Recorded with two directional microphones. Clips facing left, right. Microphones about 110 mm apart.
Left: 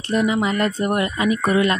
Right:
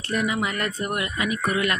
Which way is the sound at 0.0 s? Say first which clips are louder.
Left 6 dB; 25° left (ahead or behind).